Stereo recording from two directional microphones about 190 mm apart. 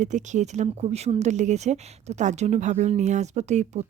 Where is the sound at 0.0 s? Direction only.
40° right (ahead or behind).